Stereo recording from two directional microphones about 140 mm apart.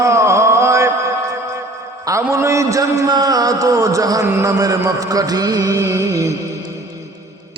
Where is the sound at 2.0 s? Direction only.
20° right (ahead or behind).